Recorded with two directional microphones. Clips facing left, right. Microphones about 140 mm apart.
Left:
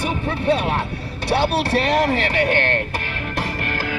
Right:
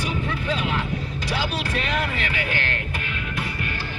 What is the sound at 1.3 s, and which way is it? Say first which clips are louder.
Music: left 9 dB; 60° left (ahead or behind).